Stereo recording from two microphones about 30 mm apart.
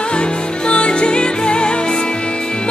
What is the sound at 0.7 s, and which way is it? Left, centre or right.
Music, left.